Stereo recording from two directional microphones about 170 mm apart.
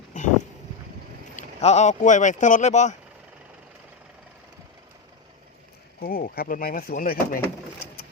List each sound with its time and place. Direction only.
0.1 s a sound: 45° left (ahead or behind)
1.4 s speech: 40° left (ahead or behind)
6.0 s speech: 60° left (ahead or behind)